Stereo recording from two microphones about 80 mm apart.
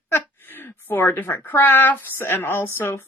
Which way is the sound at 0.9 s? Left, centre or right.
Left.